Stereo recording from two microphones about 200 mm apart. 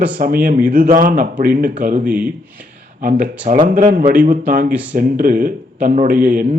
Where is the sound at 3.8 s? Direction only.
45° right (ahead or behind).